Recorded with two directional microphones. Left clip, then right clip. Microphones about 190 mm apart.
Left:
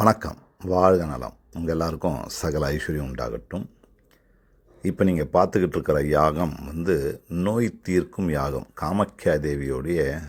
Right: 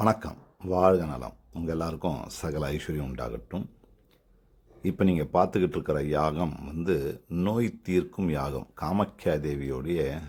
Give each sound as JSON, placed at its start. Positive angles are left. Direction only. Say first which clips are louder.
{"t": 0.0, "sound": "speech", "louder": "left 6 dB", "side_deg": 25}
{"t": 4.8, "sound": "speech", "louder": "left 4 dB", "side_deg": 15}